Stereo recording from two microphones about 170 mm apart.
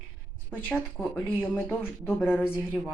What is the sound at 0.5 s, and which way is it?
Speech, 10° left (ahead or behind).